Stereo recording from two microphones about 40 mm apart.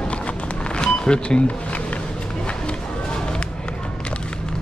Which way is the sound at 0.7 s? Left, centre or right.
Left.